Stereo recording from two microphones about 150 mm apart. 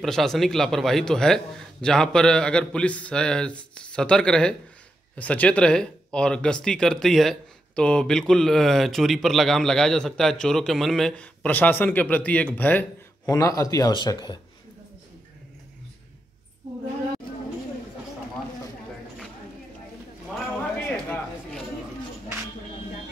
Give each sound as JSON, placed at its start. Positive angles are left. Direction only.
{"t": 0.0, "sound": "speech", "side_deg": 5}
{"t": 13.2, "sound": "a man's voice", "side_deg": 25}
{"t": 20.9, "sound": "a sound", "side_deg": 5}